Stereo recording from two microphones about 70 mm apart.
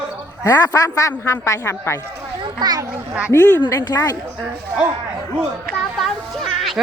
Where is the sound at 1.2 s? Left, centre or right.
Left.